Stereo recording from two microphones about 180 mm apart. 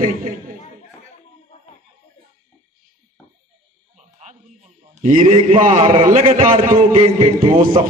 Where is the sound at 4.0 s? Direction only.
40° right (ahead or behind).